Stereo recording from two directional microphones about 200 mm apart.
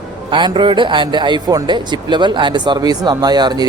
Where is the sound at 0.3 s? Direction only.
20° right (ahead or behind).